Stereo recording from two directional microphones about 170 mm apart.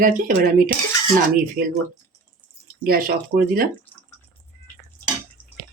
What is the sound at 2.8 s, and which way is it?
Speech, 60° right (ahead or behind).